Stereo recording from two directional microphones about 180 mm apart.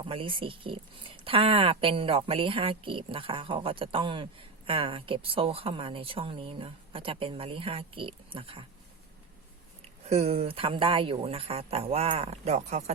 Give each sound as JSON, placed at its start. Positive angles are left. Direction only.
{"t": 0.0, "sound": "speech", "side_deg": -30}
{"t": 10.1, "sound": "speech", "side_deg": -35}